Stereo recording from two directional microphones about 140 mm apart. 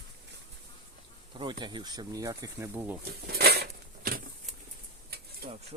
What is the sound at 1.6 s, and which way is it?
Speech, 30° right (ahead or behind).